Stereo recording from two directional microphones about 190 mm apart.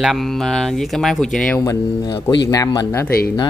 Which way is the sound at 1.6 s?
15° left (ahead or behind).